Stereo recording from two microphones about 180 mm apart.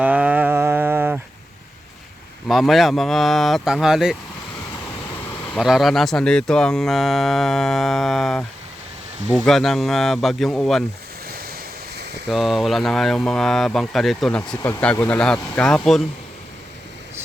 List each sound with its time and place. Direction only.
0.0 s a sound: 5° right (ahead or behind)
2.5 s speech: centre (ahead or behind)
5.5 s speech: centre (ahead or behind)
11.3 s waves: 55° right (ahead or behind)
12.3 s speech: centre (ahead or behind)